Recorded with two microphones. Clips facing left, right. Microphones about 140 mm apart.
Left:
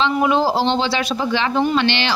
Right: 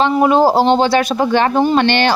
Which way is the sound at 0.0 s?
45° right (ahead or behind).